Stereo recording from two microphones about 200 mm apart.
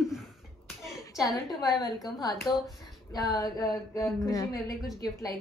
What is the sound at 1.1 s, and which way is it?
Speech, centre (ahead or behind).